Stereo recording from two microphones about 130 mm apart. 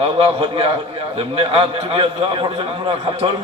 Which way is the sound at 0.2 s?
45° right (ahead or behind).